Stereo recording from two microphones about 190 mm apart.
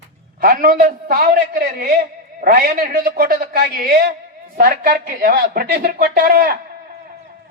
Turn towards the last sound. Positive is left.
turn(degrees=-50)  # may be behind; listen again after turning